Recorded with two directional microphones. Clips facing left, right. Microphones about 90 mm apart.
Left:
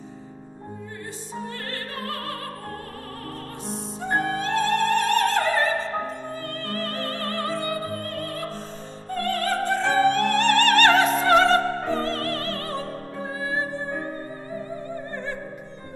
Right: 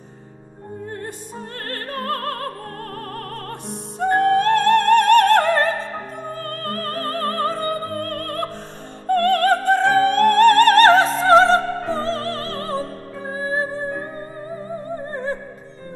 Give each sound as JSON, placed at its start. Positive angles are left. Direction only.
{"t": 1.7, "sound": "music", "side_deg": -50}
{"t": 3.6, "sound": "music", "side_deg": -60}